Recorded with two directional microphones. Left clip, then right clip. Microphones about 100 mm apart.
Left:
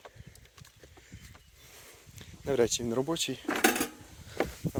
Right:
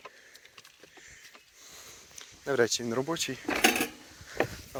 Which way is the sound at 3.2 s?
50° left (ahead or behind).